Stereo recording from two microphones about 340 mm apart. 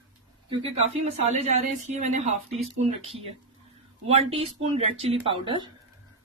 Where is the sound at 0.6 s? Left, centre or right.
Centre.